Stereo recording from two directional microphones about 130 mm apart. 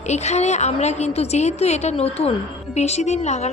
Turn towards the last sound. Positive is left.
turn(degrees=60)  # may be behind; listen again after turning